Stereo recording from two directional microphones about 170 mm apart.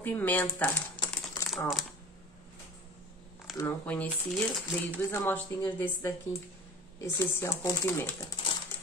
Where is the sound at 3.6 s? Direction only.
10° left (ahead or behind).